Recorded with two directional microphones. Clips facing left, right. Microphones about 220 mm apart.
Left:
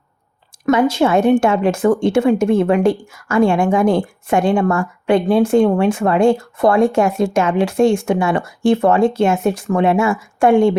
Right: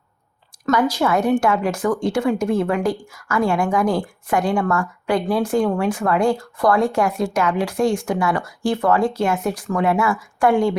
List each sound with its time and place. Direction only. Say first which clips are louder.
0.7 s speech: left 5 dB; 25° left (ahead or behind)